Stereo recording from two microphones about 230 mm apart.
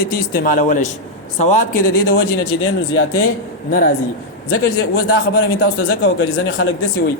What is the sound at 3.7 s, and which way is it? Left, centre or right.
Speech, left.